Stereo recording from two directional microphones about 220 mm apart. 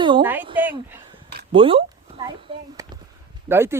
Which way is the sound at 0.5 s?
10° right (ahead or behind).